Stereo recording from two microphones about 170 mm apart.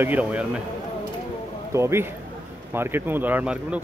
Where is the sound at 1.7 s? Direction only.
15° right (ahead or behind).